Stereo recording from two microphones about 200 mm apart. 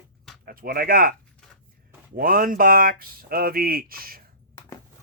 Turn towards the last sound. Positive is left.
turn(degrees=-45)  # may be behind; listen again after turning